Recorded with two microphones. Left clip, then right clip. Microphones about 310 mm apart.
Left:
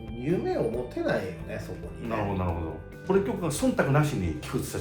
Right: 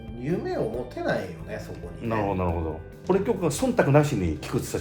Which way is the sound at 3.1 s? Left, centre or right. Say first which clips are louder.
Right 3 dB; right.